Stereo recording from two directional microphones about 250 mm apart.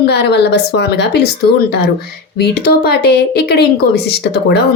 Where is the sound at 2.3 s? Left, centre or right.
Left.